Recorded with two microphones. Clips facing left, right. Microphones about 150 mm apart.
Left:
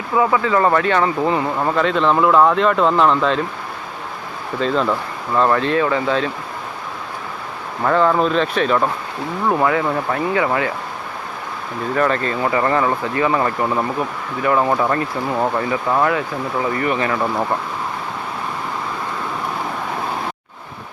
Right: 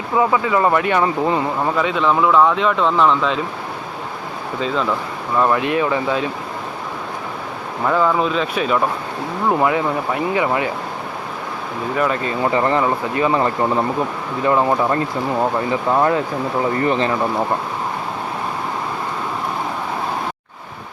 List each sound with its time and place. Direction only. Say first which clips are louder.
0.2 s speech: even; 15° right (ahead or behind)
1.6 s speech: left 3 dB; 5° right (ahead or behind)
4.6 s speech: left 2 dB; centre (ahead or behind)
5.4 s speech: left 1 dB; 10° right (ahead or behind)
7.9 s speech: left 2 dB; 5° right (ahead or behind)
9.5 s speech: even; 20° right (ahead or behind)
11.9 s speech: left 2 dB; 10° right (ahead or behind)
12.5 s speech: right 1 dB; 20° right (ahead or behind)
14.6 s speech: right 1 dB; 10° right (ahead or behind)
16.8 s speech: right 2 dB; 30° right (ahead or behind)